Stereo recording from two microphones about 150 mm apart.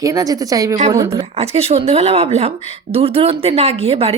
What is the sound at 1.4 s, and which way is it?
A woman's voice, 45° right (ahead or behind).